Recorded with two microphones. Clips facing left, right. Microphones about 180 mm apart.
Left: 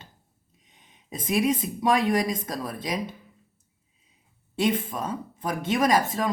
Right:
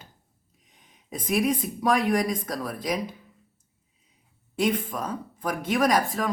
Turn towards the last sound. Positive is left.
turn(degrees=25)  # may be behind; listen again after turning